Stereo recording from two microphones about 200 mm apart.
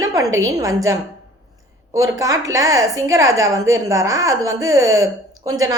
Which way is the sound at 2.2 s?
15° right (ahead or behind).